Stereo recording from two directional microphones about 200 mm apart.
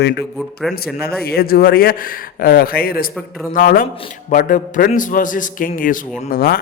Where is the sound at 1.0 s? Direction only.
50° left (ahead or behind).